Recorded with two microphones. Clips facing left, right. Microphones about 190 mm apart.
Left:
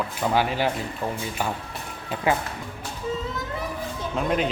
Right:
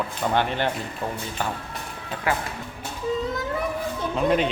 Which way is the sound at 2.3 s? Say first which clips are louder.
Left 3 dB; 20° left (ahead or behind).